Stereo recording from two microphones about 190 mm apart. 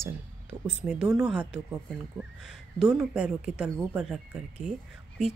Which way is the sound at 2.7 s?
Centre (ahead or behind).